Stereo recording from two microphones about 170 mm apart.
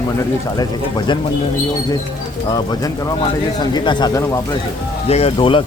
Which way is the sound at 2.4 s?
25° left (ahead or behind).